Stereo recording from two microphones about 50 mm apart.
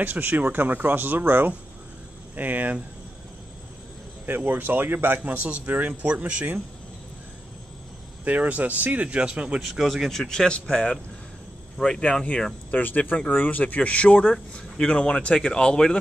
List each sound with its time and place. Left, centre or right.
0.0 s speech: right
4.5 s speech: right
5.3 s speech: right
8.3 s speech: right
9.8 s speech: centre
12.0 s speech: left
12.7 s a man's voice: left; by 16.0 s centre